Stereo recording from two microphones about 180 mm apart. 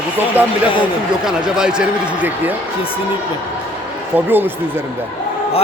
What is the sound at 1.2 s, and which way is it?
Speech, 5° right (ahead or behind).